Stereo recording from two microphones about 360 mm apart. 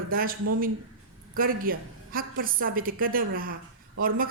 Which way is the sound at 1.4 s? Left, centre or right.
Right.